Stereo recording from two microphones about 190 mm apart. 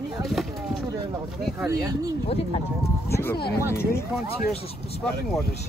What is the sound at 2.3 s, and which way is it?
Speech, 30° left (ahead or behind).